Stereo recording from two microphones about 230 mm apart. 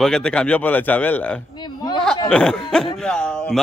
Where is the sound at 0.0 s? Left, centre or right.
Centre.